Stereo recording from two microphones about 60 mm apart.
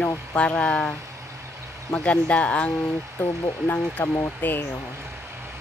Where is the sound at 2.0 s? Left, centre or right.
Centre.